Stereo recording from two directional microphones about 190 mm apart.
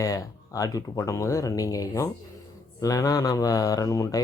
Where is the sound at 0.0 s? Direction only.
20° left (ahead or behind).